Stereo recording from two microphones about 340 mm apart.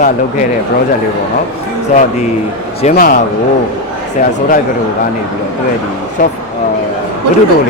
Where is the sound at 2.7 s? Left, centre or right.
Left.